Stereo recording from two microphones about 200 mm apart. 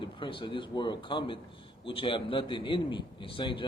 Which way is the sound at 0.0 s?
25° left (ahead or behind).